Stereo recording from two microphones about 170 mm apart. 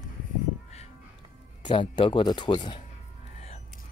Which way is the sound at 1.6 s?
25° left (ahead or behind).